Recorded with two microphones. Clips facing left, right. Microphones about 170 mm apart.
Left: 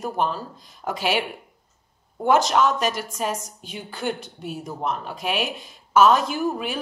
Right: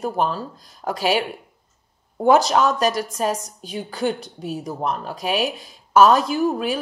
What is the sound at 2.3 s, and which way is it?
Speech, 35° right (ahead or behind).